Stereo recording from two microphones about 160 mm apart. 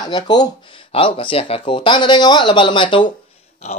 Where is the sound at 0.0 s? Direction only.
25° left (ahead or behind).